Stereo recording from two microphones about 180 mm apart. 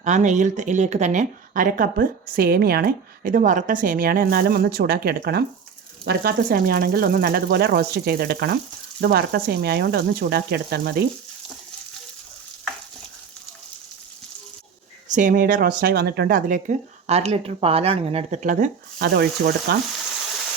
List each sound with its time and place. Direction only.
0.0 s speech: 40° right (ahead or behind); by 11.0 s 65° right (ahead or behind)
15.1 s speech: 45° right (ahead or behind)
18.9 s speech: 65° right (ahead or behind)